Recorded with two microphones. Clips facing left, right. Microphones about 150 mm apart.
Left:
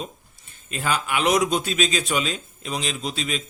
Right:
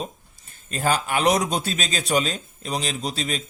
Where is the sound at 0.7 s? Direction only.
40° right (ahead or behind).